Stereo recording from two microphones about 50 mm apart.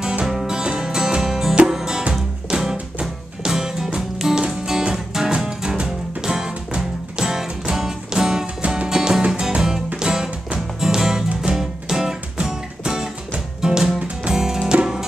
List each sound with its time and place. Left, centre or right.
0.3 s music: centre
13.9 s music: right
14.3 s music: centre